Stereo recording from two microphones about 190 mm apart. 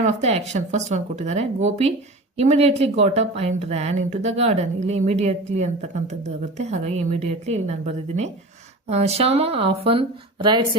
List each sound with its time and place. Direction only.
0.0 s speech: 35° right (ahead or behind)